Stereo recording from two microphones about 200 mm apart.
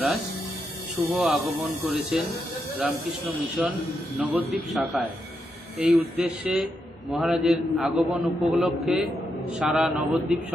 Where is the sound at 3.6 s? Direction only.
5° right (ahead or behind).